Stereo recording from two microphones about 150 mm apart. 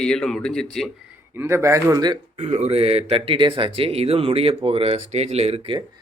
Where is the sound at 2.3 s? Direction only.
50° right (ahead or behind).